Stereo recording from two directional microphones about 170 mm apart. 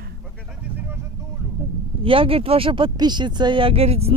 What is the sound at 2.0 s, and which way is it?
Speech, 30° right (ahead or behind).